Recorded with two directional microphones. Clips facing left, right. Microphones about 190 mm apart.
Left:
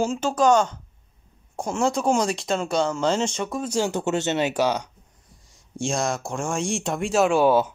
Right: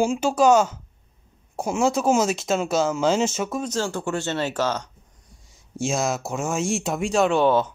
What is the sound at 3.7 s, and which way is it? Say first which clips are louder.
Speech: left 2 dB; 20° left (ahead or behind).